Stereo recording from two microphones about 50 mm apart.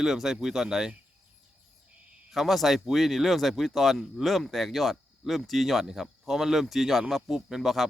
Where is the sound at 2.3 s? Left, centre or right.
Centre.